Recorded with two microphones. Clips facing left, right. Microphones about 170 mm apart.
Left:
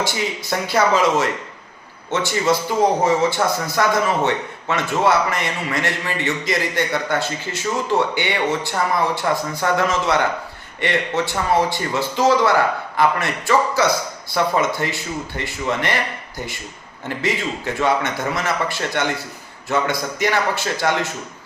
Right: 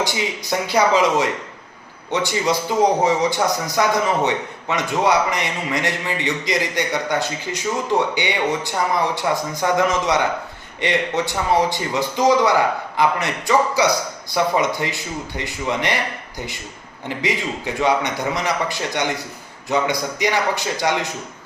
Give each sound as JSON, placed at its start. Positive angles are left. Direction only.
{"t": 0.0, "sound": "a man's voice", "side_deg": -15}
{"t": 17.1, "sound": "a man's voice", "side_deg": -15}